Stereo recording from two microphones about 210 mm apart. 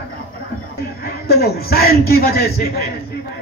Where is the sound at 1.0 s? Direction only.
50° left (ahead or behind).